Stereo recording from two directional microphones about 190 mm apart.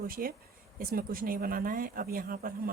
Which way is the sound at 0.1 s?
50° right (ahead or behind).